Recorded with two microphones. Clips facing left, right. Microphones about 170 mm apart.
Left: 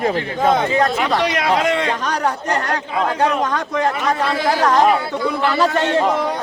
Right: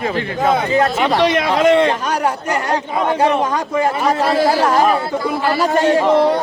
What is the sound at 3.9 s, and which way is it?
Speech, 30° right (ahead or behind).